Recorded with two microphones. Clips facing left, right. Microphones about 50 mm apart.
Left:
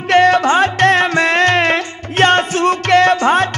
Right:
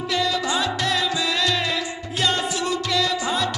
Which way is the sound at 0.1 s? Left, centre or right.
Left.